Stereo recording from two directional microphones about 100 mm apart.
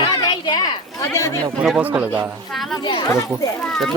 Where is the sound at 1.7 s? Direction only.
15° right (ahead or behind).